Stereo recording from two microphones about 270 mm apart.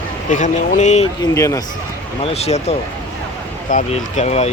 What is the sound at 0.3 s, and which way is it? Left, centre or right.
Speech, left.